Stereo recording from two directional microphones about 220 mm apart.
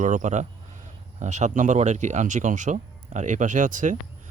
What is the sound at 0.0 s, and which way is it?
Speech, 35° right (ahead or behind).